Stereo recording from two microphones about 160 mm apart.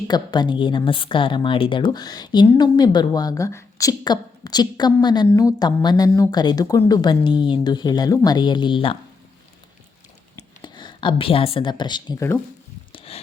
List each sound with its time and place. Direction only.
0.1 s a woman's voice: 30° left (ahead or behind)
10.3 s speech: 30° left (ahead or behind)
12.9 s a sound: 35° left (ahead or behind)